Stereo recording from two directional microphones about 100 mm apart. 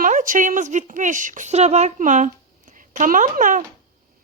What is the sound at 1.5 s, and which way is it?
Speech, 90° right.